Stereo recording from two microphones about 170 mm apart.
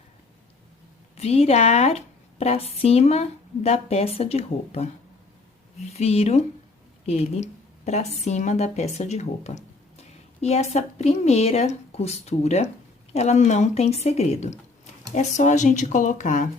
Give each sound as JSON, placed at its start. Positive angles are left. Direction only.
{"t": 1.1, "sound": "a woman's voice", "side_deg": 35}